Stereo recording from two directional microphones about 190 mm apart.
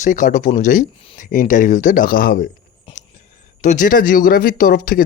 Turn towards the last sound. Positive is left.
turn(degrees=50)  # may be behind; listen again after turning